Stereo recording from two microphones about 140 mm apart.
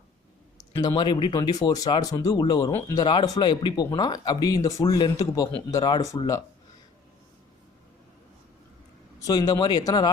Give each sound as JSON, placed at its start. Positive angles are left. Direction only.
{"t": 0.8, "sound": "speech", "side_deg": 30}
{"t": 9.2, "sound": "speech", "side_deg": 25}